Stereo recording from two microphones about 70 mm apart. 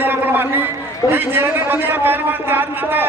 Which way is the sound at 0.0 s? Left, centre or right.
Right.